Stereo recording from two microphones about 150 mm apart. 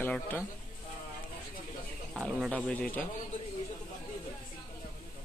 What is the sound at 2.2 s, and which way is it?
Speech, centre (ahead or behind).